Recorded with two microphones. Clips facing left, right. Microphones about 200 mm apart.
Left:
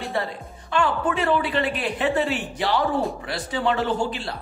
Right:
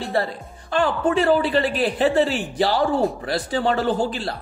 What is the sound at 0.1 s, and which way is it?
Speech, 35° right (ahead or behind).